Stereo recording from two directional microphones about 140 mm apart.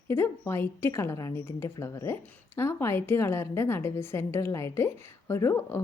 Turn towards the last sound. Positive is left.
turn(degrees=20)  # may be behind; listen again after turning